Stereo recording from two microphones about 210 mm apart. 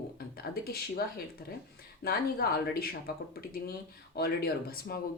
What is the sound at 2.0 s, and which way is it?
Speech, 45° left (ahead or behind).